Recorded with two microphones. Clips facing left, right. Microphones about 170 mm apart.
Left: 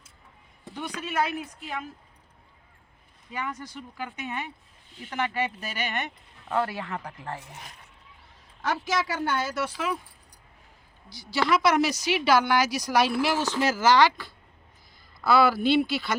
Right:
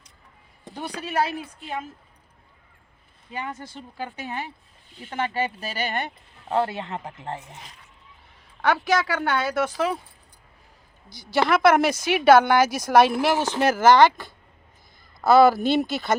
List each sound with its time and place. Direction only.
0.7 s speech: 35° right (ahead or behind)
3.2 s speech: 30° right (ahead or behind)
8.6 s speech: 70° right (ahead or behind)
9.6 s speech: 40° right (ahead or behind)
11.1 s speech: 50° right (ahead or behind)